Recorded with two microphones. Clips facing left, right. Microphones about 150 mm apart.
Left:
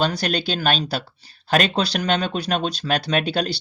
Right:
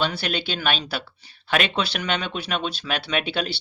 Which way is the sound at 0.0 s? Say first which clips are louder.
Left 4 dB; 40° left (ahead or behind).